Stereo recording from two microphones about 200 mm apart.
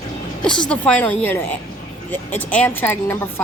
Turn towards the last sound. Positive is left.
turn(degrees=10)  # may be behind; listen again after turning